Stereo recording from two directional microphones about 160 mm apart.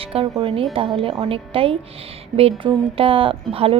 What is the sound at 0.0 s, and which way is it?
A woman's voice, 35° right (ahead or behind).